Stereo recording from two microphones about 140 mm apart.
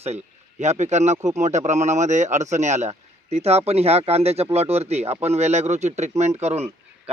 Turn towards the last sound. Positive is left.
turn(degrees=-50)  # may be behind; listen again after turning